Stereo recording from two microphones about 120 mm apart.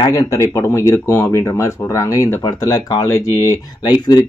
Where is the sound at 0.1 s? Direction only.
30° left (ahead or behind).